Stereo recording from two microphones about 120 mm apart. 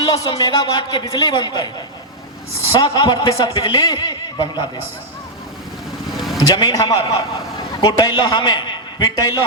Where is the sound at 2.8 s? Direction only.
40° left (ahead or behind).